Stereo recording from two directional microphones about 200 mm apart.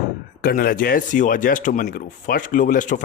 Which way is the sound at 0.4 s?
45° left (ahead or behind).